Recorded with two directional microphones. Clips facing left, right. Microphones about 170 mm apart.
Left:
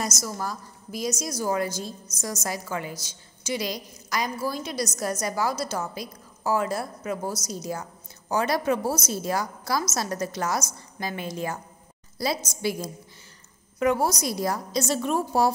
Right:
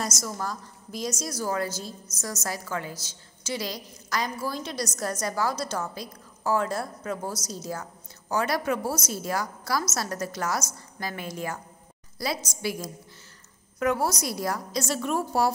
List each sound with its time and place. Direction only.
0.2 s a woman's voice: 10° left (ahead or behind); by 12.3 s 25° left (ahead or behind)
13.7 s a woman's voice: 15° left (ahead or behind)